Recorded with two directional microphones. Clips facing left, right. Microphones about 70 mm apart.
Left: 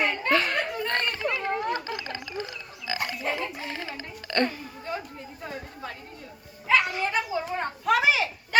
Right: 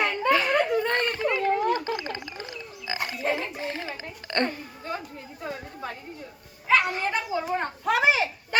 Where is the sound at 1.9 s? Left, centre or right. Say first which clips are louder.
Right 3 dB; right.